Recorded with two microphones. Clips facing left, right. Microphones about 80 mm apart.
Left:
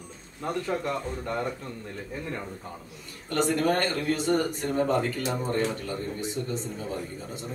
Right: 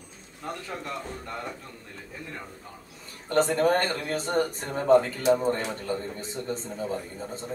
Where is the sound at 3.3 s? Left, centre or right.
Right.